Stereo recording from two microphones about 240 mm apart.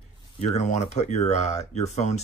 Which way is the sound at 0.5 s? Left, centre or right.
Left.